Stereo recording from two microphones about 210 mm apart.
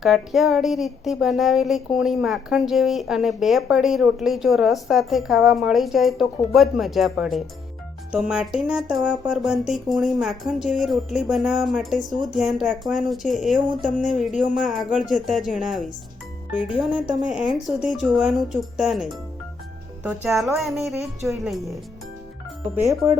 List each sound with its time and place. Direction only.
0.0 s a woman's voice: centre (ahead or behind)
14.6 s a woman's voice: centre (ahead or behind)
22.7 s speech: 10° right (ahead or behind)